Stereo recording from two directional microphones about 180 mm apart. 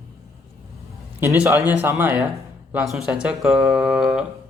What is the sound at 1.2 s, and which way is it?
Speech, 15° right (ahead or behind).